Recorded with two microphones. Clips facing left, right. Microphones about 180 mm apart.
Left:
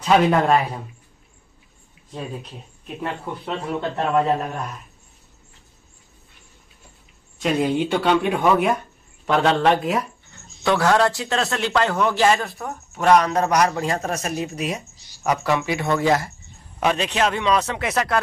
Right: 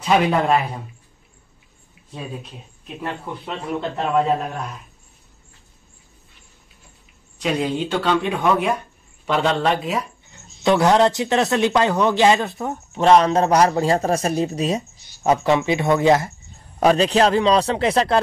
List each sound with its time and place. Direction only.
0.0 s a man's voice: 5° right (ahead or behind)
3.0 s speech: 10° left (ahead or behind)
3.9 s a man's voice: centre (ahead or behind)
7.4 s a man's voice: 5° left (ahead or behind)
10.6 s a man's voice: 20° right (ahead or behind)
16.8 s speech: 35° right (ahead or behind)